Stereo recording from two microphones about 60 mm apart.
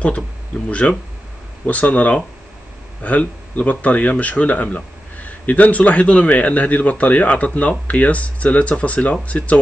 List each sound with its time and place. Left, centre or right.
0.7 s speech: left